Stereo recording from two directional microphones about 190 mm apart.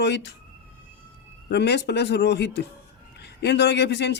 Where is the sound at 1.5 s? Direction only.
60° left (ahead or behind).